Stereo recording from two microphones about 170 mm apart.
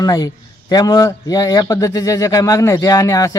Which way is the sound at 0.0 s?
20° left (ahead or behind).